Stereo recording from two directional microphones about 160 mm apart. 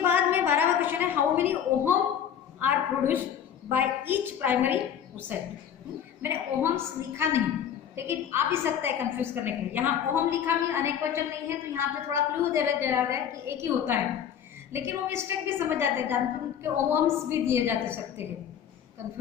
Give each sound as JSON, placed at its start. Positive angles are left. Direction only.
{"t": 0.0, "sound": "a sound", "side_deg": -15}
{"t": 2.6, "sound": "a woman's voice", "side_deg": -10}
{"t": 6.2, "sound": "a woman's voice", "side_deg": -15}